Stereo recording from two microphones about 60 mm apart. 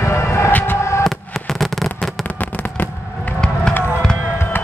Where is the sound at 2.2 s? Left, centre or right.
Left.